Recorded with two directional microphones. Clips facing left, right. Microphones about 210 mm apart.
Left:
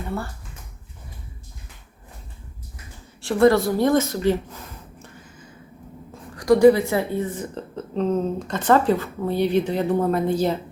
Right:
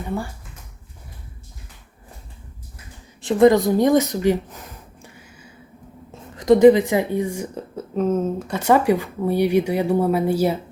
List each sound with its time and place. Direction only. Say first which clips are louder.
0.1 s a woman's voice: right 3 dB; 15° right (ahead or behind)
3.2 s a woman's voice: right 2 dB; 20° right (ahead or behind)
5.0 s a sound: left 1 dB; 10° right (ahead or behind)
6.3 s a woman's voice: right 2 dB; 20° right (ahead or behind)